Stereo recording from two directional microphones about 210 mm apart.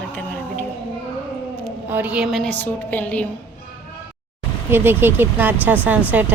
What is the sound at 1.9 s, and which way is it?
A woman's voice, 5° right (ahead or behind).